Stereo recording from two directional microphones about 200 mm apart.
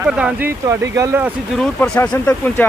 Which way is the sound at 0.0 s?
5° right (ahead or behind).